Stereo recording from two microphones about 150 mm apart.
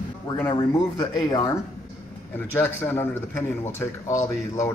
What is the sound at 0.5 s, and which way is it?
Speech, 30° left (ahead or behind).